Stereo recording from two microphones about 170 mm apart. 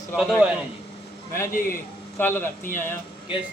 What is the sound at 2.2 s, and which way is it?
Speech, 10° left (ahead or behind).